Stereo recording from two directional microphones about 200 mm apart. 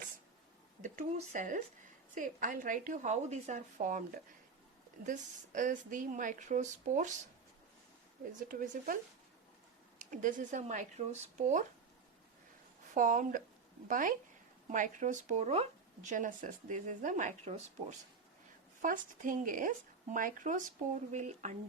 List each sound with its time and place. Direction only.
0.8 s a woman's voice: 40° right (ahead or behind)
5.0 s a woman's voice: 40° right (ahead or behind)
8.4 s a woman's voice: 40° right (ahead or behind)
10.1 s a woman's voice: 40° right (ahead or behind)
12.9 s a woman's voice: 40° right (ahead or behind)